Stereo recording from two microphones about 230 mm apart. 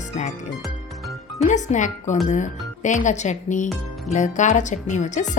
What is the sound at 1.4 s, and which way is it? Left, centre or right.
Speech, left.